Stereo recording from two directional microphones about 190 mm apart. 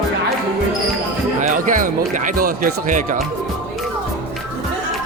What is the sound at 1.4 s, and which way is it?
Speech, 45° right (ahead or behind).